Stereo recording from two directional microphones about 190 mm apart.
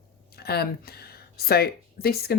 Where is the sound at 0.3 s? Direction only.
55° left (ahead or behind).